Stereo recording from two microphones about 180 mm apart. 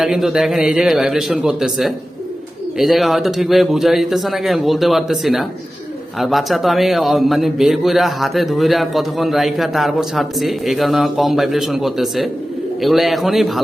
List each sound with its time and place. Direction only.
0.0 s a man's voice: centre (ahead or behind)